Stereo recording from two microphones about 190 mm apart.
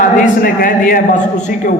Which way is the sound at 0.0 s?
45° left (ahead or behind).